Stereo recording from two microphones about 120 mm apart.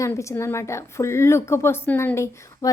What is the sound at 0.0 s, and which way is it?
A woman's voice, 25° left (ahead or behind).